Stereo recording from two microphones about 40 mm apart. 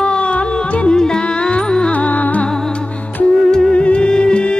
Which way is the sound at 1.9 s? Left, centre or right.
Left.